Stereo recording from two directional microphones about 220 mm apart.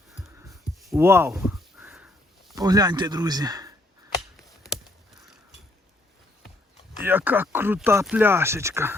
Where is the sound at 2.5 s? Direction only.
15° right (ahead or behind).